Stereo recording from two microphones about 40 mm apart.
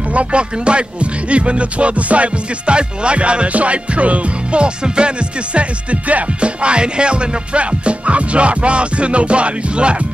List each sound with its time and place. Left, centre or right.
0.1 s music: right